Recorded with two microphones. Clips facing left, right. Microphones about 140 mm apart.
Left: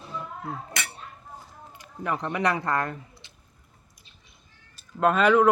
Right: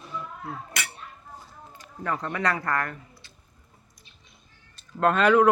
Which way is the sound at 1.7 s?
15° left (ahead or behind).